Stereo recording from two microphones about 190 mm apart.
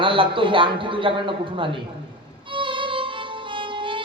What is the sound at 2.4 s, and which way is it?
Violin, 25° right (ahead or behind).